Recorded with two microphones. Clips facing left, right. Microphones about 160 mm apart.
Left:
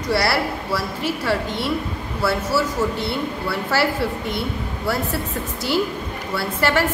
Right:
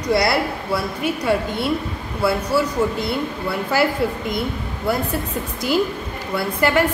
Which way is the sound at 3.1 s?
20° right (ahead or behind).